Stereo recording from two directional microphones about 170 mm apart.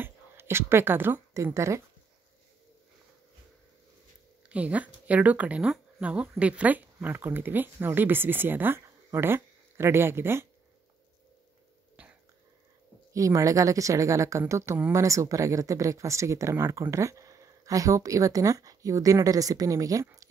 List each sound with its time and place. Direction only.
0.0 s a woman's voice: 15° right (ahead or behind)
4.5 s speech: 10° right (ahead or behind)
12.0 s a sound: 10° right (ahead or behind)
13.1 s speech: 20° right (ahead or behind)